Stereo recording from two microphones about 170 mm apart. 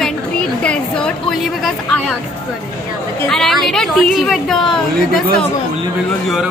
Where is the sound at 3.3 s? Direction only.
Centre (ahead or behind).